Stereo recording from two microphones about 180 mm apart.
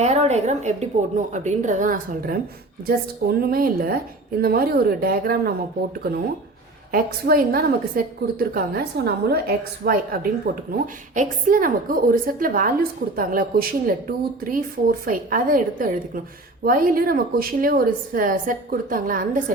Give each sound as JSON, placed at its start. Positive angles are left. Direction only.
{"t": 0.0, "sound": "a woman's voice", "side_deg": -40}
{"t": 6.9, "sound": "a woman's voice", "side_deg": -55}